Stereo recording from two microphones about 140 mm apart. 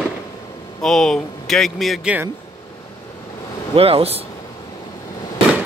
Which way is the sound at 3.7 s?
45° right (ahead or behind).